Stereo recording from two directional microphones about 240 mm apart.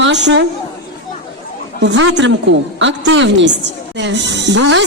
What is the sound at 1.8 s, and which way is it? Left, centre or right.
A man's voice, right.